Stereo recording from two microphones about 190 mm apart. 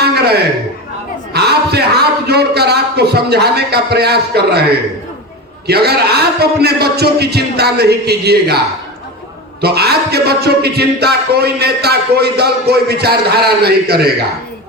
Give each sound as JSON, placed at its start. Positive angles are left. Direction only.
{"t": 0.0, "sound": "a sound", "side_deg": -60}
{"t": 2.2, "sound": "a man's voice", "side_deg": -60}
{"t": 5.6, "sound": "a man's voice", "side_deg": -60}